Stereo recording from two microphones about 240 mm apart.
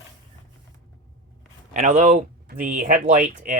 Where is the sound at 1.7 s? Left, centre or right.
Right.